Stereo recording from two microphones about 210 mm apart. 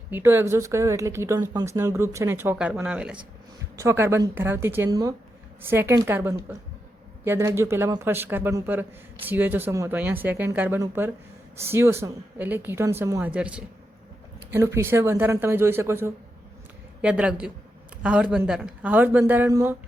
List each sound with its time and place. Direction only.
0.1 s a man's voice: 10° right (ahead or behind)